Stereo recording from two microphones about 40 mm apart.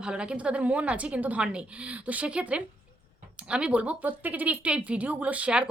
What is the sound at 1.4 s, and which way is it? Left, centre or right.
Speech, right.